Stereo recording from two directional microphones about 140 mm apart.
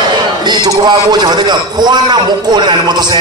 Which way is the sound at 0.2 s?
30° right (ahead or behind).